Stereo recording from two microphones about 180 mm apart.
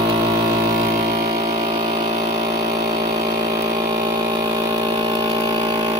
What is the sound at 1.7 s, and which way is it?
Vehicle, 20° right (ahead or behind).